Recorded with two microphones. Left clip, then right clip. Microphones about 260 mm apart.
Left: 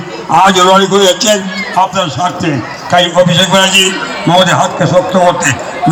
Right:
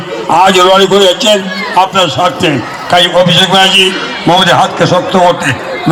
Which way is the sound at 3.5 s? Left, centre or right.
Right.